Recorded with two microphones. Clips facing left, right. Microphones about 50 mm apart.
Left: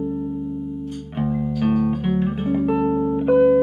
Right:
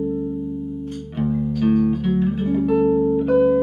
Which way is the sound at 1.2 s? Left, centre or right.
Centre.